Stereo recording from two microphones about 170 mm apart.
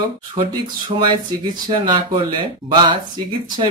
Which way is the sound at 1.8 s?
30° right (ahead or behind).